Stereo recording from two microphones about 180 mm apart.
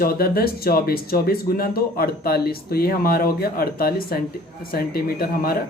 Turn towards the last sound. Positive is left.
turn(degrees=55)  # may be behind; listen again after turning